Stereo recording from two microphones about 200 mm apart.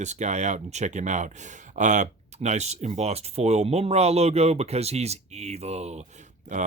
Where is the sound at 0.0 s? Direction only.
35° right (ahead or behind).